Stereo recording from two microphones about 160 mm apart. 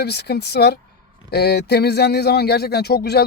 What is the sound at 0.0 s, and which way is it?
A man's voice, 90° left.